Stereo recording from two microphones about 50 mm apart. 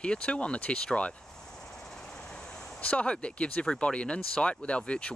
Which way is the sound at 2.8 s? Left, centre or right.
Left.